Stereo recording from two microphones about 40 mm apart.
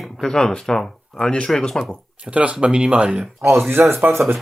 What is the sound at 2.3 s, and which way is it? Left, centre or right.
Speech, right.